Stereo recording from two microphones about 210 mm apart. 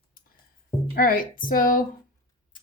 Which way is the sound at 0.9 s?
40° left (ahead or behind).